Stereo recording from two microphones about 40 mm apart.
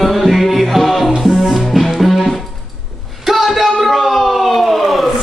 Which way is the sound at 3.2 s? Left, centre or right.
Centre.